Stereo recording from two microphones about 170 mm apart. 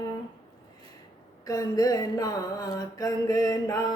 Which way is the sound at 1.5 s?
20° left (ahead or behind).